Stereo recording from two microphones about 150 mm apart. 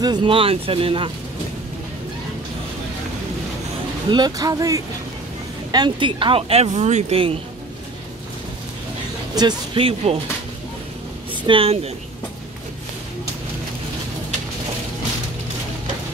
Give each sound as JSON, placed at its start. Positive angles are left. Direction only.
{"t": 0.0, "sound": "speech", "side_deg": -30}
{"t": 4.1, "sound": "speech", "side_deg": -25}
{"t": 9.3, "sound": "speech", "side_deg": -30}
{"t": 11.4, "sound": "speech", "side_deg": -40}